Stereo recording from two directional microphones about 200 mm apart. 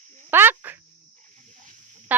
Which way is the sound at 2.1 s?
10° right (ahead or behind).